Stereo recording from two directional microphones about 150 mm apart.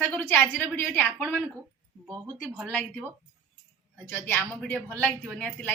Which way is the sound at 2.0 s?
25° right (ahead or behind).